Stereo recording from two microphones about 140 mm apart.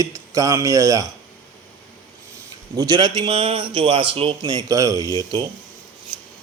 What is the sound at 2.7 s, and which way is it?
A man's voice, 30° right (ahead or behind).